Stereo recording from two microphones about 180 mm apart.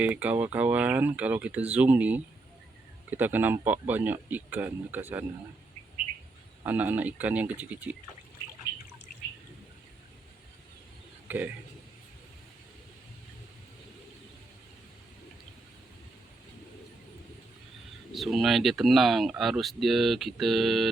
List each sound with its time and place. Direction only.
0.0 s speech: 10° right (ahead or behind)
6.7 s speech: 10° right (ahead or behind)
11.3 s a man's voice: 10° right (ahead or behind)
18.1 s speech: centre (ahead or behind)